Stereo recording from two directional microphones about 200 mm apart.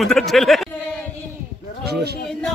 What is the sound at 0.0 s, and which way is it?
Speech, centre (ahead or behind).